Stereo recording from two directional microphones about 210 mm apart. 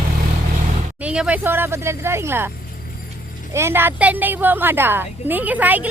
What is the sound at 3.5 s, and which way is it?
A woman's voice, 10° right (ahead or behind).